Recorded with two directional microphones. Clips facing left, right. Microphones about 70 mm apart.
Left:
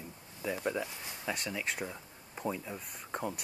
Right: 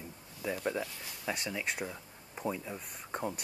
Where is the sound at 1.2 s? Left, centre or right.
Centre.